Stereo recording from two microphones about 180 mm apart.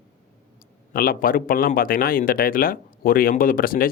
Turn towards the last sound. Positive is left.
turn(degrees=50)  # may be behind; listen again after turning